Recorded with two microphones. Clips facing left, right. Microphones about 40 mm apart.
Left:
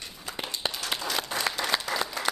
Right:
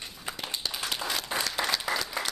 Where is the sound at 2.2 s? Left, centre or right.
Centre.